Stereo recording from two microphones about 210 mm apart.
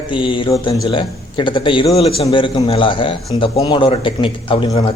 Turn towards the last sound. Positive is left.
turn(degrees=25)  # may be behind; listen again after turning